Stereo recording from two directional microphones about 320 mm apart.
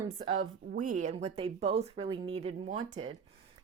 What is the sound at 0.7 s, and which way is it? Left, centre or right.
A woman's voice, right.